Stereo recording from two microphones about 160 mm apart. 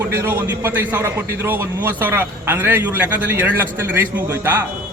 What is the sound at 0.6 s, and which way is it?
A man's voice, 15° right (ahead or behind).